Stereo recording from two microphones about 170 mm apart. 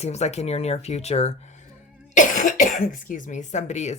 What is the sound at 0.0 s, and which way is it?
Speech, 40° left (ahead or behind).